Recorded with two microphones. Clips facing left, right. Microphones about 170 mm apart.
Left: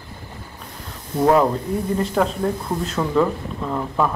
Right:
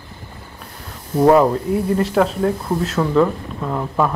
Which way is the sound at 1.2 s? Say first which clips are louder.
Right 4 dB; 10° right (ahead or behind).